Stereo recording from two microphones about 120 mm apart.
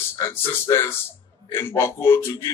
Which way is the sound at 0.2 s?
20° left (ahead or behind).